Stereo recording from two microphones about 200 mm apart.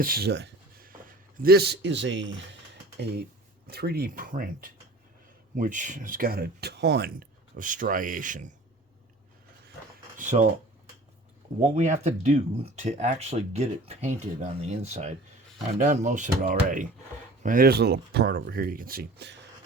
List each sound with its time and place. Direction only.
0.0 s a man's voice: 50° right (ahead or behind)
3.7 s speech: 50° right (ahead or behind)
10.2 s speech: 35° right (ahead or behind)
11.6 s speech: 35° right (ahead or behind); by 19.4 s 55° right (ahead or behind)